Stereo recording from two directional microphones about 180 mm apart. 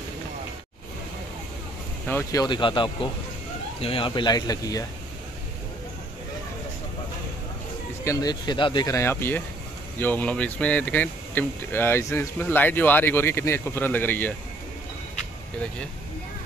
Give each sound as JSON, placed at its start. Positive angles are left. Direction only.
{"t": 2.0, "sound": "speech", "side_deg": 10}
{"t": 2.4, "sound": "speech", "side_deg": 25}
{"t": 8.0, "sound": "speech", "side_deg": 20}